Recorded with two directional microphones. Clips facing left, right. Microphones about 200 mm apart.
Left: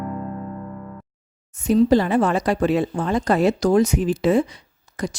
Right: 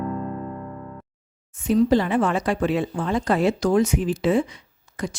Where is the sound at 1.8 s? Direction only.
40° left (ahead or behind).